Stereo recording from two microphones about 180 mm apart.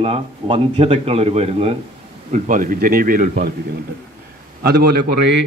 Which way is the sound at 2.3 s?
45° right (ahead or behind).